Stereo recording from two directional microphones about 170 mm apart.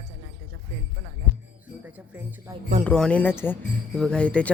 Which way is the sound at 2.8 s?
5° left (ahead or behind).